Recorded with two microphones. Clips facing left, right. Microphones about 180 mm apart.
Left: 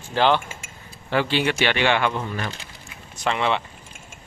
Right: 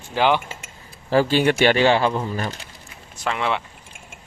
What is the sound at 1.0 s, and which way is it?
Speech, 40° right (ahead or behind).